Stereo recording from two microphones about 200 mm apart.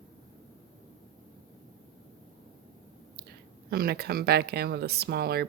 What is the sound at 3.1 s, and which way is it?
Speech, 50° right (ahead or behind).